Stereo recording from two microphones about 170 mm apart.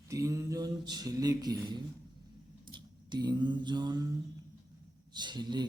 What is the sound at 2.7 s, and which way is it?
Mantra, 25° right (ahead or behind).